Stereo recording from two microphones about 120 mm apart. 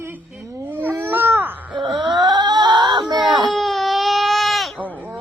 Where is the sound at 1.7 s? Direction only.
40° right (ahead or behind).